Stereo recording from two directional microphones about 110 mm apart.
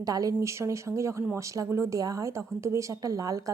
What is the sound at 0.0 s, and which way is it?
A woman's voice, 35° right (ahead or behind).